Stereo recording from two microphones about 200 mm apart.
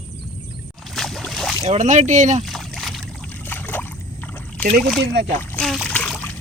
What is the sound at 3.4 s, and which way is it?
Boat, 10° left (ahead or behind).